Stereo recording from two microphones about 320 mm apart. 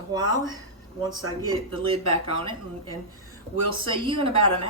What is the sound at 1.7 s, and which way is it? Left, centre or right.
Speech, left.